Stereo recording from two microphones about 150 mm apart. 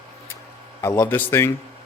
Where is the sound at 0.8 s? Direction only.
20° left (ahead or behind).